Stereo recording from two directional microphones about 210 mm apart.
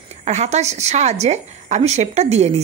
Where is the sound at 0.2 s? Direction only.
30° right (ahead or behind).